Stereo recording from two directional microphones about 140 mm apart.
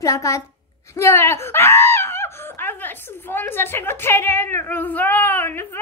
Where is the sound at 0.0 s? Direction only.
20° left (ahead or behind).